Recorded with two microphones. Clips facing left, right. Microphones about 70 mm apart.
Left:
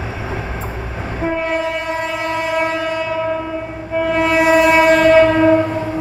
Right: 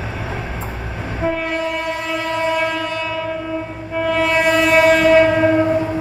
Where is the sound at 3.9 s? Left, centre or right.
Centre.